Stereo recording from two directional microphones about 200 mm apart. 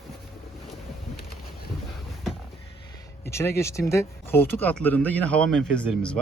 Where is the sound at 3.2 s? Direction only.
15° left (ahead or behind).